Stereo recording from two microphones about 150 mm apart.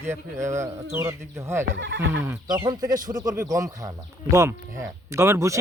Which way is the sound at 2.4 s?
30° right (ahead or behind).